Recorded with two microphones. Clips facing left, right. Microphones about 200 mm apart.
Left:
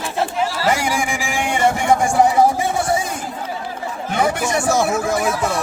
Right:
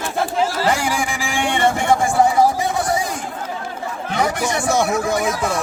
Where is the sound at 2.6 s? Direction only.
30° left (ahead or behind).